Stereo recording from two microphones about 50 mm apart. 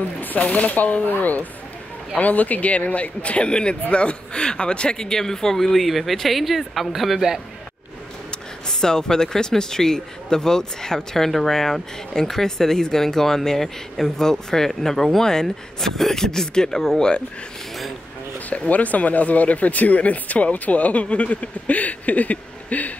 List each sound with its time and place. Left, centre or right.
0.2 s speech: left; by 7.4 s centre
8.3 s speech: centre
18.5 s speech: left